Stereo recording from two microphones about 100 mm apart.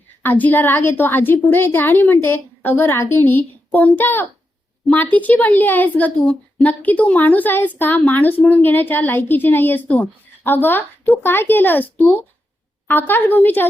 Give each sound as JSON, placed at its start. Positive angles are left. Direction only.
{"t": 0.2, "sound": "a woman's voice", "side_deg": 20}